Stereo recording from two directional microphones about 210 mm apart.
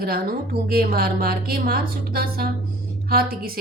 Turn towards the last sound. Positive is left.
turn(degrees=-45)  # may be behind; listen again after turning